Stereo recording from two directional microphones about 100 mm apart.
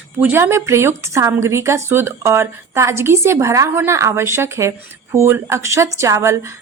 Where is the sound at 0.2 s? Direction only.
20° right (ahead or behind).